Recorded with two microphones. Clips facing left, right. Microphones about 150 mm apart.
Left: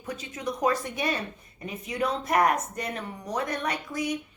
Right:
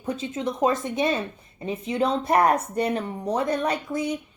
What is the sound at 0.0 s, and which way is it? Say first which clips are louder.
Speech: right 6 dB; 30° right (ahead or behind).